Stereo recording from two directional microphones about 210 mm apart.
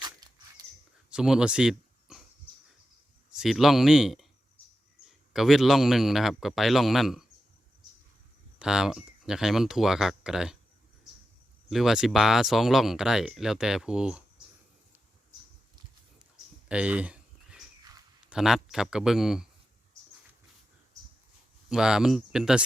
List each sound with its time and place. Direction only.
0.0 s dog: 20° right (ahead or behind)
1.1 s a sound: 5° right (ahead or behind)
3.3 s a man's voice: centre (ahead or behind)
5.3 s speech: centre (ahead or behind)
8.5 s speech: 5° right (ahead or behind)
11.7 s speech: centre (ahead or behind)
16.6 s a sound: 5° right (ahead or behind)
18.3 s speech: centre (ahead or behind)
21.7 s speech: 5° right (ahead or behind)